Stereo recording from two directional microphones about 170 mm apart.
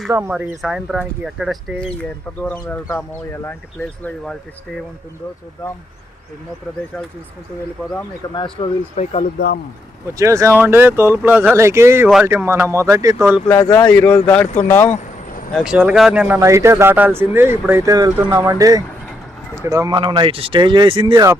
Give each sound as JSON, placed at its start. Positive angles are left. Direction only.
{"t": 0.1, "sound": "speech", "side_deg": -10}
{"t": 8.6, "sound": "speech", "side_deg": 35}
{"t": 10.2, "sound": "speech", "side_deg": -20}
{"t": 13.5, "sound": "speech", "side_deg": 25}
{"t": 13.9, "sound": "speech", "side_deg": 10}
{"t": 15.5, "sound": "speech", "side_deg": -5}